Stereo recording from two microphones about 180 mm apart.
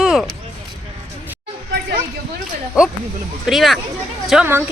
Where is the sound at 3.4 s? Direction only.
Centre (ahead or behind).